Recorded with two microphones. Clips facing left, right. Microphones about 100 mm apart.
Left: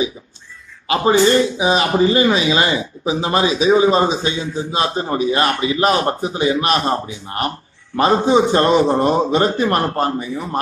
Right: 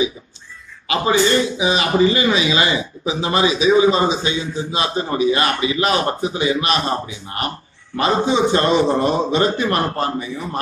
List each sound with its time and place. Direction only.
1.6 s speech: 40° left (ahead or behind)